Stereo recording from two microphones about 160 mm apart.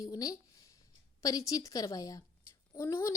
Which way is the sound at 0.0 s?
20° left (ahead or behind).